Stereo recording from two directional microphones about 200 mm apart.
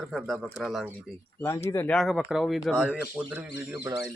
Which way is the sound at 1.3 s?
10° left (ahead or behind).